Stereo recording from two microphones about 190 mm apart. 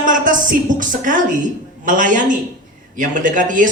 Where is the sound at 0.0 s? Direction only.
45° right (ahead or behind).